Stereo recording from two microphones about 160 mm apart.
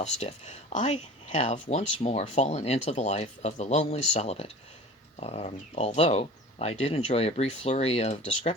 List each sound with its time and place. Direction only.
0.0 s speech: 45° left (ahead or behind)